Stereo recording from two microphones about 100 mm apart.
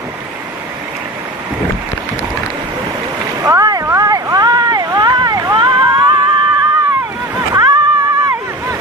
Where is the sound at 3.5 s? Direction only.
35° right (ahead or behind).